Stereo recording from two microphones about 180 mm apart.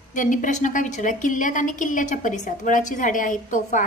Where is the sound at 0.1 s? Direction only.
45° left (ahead or behind).